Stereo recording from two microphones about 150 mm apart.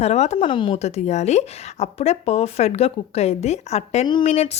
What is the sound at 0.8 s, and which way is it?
Speech, 45° left (ahead or behind).